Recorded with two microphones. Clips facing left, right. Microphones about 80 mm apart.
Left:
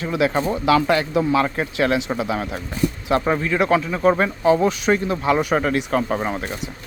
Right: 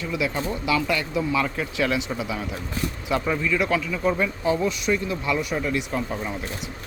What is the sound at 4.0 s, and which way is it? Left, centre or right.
Speech, left.